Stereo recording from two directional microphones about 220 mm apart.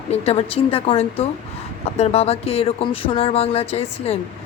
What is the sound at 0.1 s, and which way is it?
Speech, 30° left (ahead or behind).